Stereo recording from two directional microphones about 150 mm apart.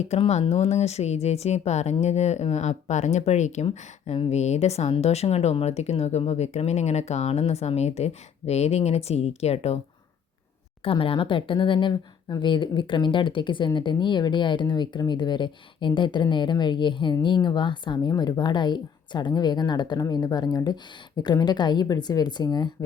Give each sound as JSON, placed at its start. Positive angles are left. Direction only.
{"t": 0.0, "sound": "a woman's voice", "side_deg": 45}
{"t": 10.8, "sound": "speech", "side_deg": 35}